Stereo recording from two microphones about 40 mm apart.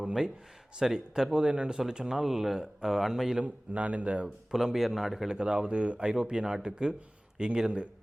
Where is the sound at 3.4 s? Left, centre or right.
Right.